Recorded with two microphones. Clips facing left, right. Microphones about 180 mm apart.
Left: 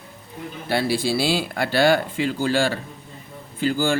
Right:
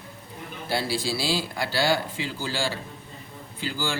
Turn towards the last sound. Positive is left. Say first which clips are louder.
# left 9 dB
turn(degrees=50)  # may be behind; listen again after turning